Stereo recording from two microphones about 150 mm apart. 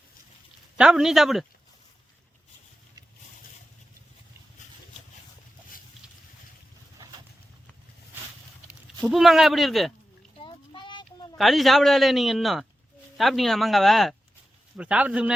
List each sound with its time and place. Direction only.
0.8 s a man's voice: 5° right (ahead or behind)
9.0 s a man's voice: centre (ahead or behind)
10.4 s a sound: 35° left (ahead or behind)
11.3 s a man's voice: centre (ahead or behind)